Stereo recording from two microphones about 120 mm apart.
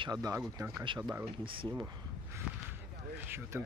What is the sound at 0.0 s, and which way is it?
Speech, 35° right (ahead or behind).